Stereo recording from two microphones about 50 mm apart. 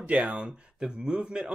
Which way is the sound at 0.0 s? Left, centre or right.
Right.